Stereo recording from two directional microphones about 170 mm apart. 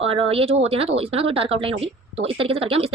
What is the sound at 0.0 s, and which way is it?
Speech, 35° right (ahead or behind).